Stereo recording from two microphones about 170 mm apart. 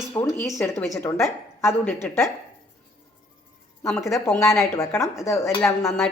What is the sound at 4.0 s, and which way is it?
A woman's voice, 15° left (ahead or behind).